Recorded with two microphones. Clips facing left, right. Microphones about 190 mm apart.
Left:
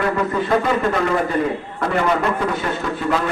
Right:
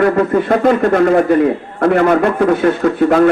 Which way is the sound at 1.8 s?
55° right (ahead or behind).